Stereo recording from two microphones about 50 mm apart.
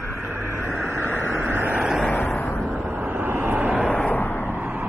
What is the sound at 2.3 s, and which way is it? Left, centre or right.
Vehicle, left.